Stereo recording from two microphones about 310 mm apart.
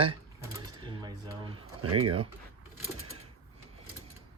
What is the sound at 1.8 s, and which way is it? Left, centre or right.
Speech, right.